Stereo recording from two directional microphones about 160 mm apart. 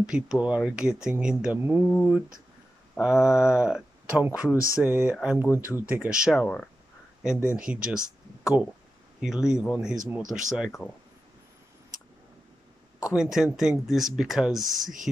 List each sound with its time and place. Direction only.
0.0 s speech: 5° right (ahead or behind)
4.5 s speech: 20° left (ahead or behind)
4.7 s a sound: 5° right (ahead or behind)
5.8 s speech: 10° right (ahead or behind)
6.4 s speech: 5° left (ahead or behind)
7.3 s a sound: 5° right (ahead or behind)
9.2 s speech: 5° right (ahead or behind)
13.1 s speech: 5° right (ahead or behind)